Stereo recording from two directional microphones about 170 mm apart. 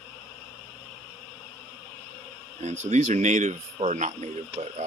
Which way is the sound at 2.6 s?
40° right (ahead or behind).